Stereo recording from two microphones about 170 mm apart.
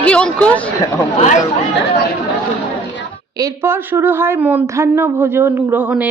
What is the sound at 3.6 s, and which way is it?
Speech, 15° right (ahead or behind).